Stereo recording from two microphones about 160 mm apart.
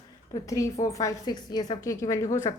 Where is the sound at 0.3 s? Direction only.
20° left (ahead or behind).